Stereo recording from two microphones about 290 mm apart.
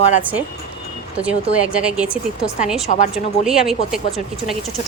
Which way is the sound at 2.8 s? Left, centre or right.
Left.